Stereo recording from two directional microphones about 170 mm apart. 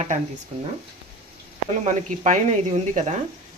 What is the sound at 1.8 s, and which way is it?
Speech, 45° right (ahead or behind).